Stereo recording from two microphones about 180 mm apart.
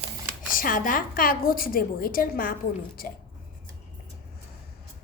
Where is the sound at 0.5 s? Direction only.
50° left (ahead or behind).